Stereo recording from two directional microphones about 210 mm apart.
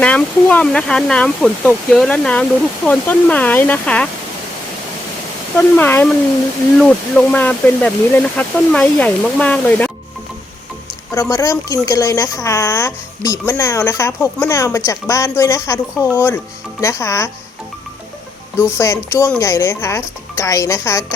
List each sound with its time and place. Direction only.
0.0 s speech: 5° left (ahead or behind)
5.5 s a woman's voice: 10° left (ahead or behind)
11.1 s a woman's voice: 15° left (ahead or behind)
18.8 s a woman's voice: 15° left (ahead or behind)